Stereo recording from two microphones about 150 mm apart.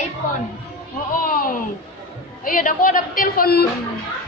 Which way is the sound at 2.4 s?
65° left (ahead or behind).